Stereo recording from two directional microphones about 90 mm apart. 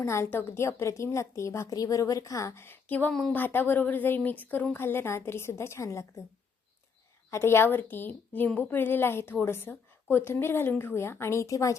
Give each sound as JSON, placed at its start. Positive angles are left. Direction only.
{"t": 0.0, "sound": "a woman's voice", "side_deg": 30}
{"t": 3.1, "sound": "a woman's voice", "side_deg": 5}
{"t": 3.3, "sound": "a woman's voice", "side_deg": 20}
{"t": 7.3, "sound": "a woman's voice", "side_deg": 30}